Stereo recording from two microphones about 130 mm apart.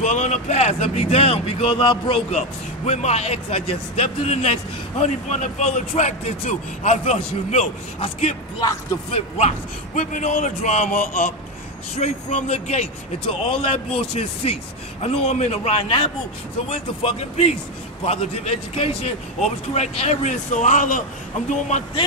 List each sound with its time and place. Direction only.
0.0 s a man's voice: 65° left (ahead or behind)
12.0 s a man's voice: 60° left (ahead or behind); by 21.0 s 75° left (ahead or behind)
21.5 s a man's voice: 65° left (ahead or behind)